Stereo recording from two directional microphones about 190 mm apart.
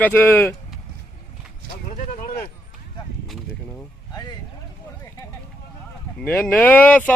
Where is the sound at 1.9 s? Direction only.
40° left (ahead or behind).